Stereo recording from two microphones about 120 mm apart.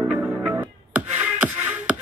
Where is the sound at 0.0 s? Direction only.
15° right (ahead or behind).